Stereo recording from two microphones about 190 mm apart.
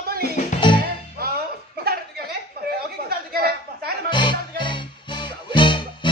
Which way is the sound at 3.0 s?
55° right (ahead or behind).